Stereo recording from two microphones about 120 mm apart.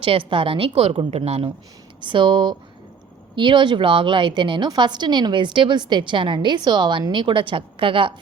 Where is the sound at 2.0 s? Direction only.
45° right (ahead or behind).